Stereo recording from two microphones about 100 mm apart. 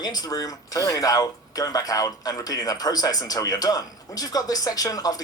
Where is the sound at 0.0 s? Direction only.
40° left (ahead or behind).